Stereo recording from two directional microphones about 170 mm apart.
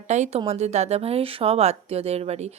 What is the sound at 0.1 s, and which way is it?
A woman's voice, 40° right (ahead or behind).